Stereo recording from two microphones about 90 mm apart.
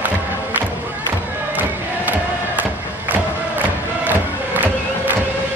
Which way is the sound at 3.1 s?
20° right (ahead or behind).